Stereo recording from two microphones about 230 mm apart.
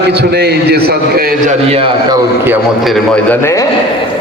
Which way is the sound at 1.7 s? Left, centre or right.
Right.